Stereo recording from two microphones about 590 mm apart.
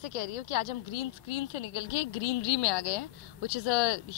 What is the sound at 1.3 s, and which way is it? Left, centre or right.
Speech, left.